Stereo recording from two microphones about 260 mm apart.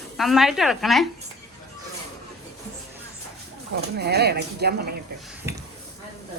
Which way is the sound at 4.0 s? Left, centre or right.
Right.